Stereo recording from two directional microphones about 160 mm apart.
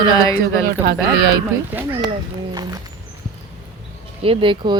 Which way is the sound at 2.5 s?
25° right (ahead or behind).